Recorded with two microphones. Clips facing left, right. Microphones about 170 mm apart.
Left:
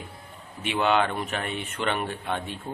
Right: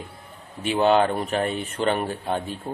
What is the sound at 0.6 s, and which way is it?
Speech, 35° right (ahead or behind).